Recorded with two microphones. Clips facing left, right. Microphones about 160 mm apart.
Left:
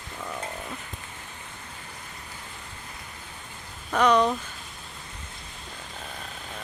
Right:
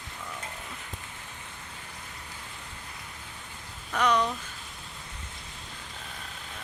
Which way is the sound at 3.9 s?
50° left (ahead or behind).